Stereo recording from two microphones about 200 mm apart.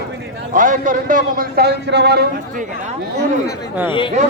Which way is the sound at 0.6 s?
40° right (ahead or behind).